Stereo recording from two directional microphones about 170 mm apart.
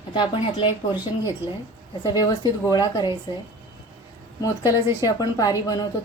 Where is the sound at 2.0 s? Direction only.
25° left (ahead or behind).